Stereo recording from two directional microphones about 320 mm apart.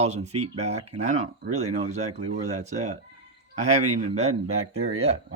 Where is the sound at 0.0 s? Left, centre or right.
Centre.